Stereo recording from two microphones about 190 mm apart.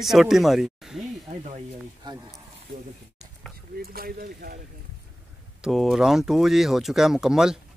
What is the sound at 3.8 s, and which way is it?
Speech, 50° right (ahead or behind).